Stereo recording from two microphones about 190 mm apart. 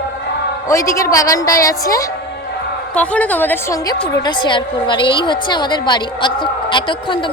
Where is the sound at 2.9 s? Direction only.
5° left (ahead or behind); by 7.3 s 25° left (ahead or behind).